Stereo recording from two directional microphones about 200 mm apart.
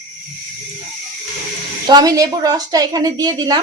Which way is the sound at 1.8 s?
20° right (ahead or behind).